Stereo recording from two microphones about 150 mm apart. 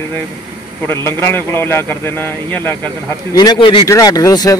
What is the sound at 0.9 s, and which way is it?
Speech, 15° left (ahead or behind).